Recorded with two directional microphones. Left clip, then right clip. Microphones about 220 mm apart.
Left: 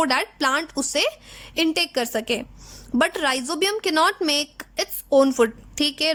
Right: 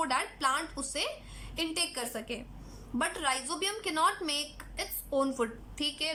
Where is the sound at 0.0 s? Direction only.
45° left (ahead or behind).